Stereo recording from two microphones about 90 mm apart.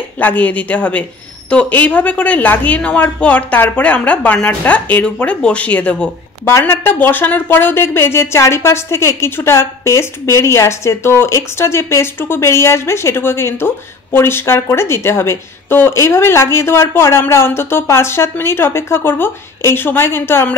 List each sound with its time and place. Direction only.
0.2 s a woman's voice: 20° left (ahead or behind)